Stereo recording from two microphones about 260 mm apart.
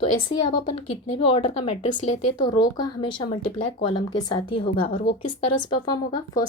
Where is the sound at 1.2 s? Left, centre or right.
Left.